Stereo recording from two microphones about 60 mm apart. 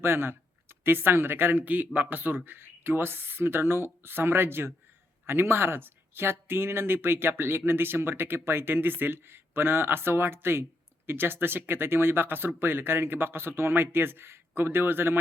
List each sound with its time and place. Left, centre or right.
0.0 s speech: right